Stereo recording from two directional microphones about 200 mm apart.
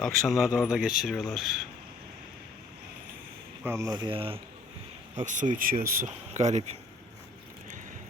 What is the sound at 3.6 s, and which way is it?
Speech, 15° right (ahead or behind).